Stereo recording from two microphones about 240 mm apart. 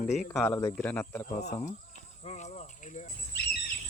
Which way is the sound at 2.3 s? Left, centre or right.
Left.